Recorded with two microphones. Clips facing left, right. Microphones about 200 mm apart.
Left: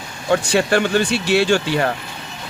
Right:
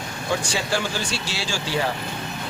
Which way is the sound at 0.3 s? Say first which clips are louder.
Left 9 dB; 60° left (ahead or behind).